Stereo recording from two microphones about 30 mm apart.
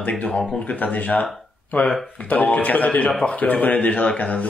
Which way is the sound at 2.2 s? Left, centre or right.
Left.